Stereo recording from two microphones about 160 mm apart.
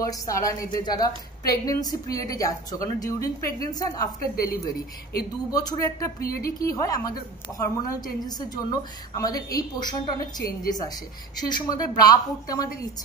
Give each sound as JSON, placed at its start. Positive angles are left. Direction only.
{"t": 0.0, "sound": "a woman's voice", "side_deg": 20}
{"t": 5.5, "sound": "a woman's voice", "side_deg": 25}
{"t": 6.1, "sound": "speech", "side_deg": 70}
{"t": 6.4, "sound": "a woman's voice", "side_deg": 20}